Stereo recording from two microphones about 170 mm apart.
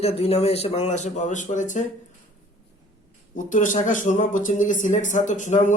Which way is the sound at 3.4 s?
50° left (ahead or behind).